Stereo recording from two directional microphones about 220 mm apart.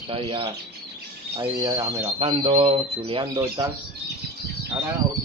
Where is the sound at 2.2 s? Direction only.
25° right (ahead or behind).